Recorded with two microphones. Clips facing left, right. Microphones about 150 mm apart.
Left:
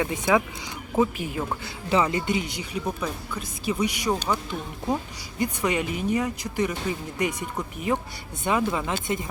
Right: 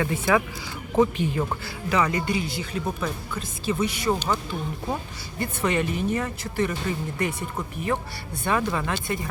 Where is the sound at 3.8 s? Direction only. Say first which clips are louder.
Right 1 dB; 15° left (ahead or behind).